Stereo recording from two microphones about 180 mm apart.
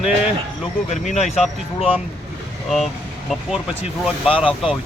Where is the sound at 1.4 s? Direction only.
5° right (ahead or behind).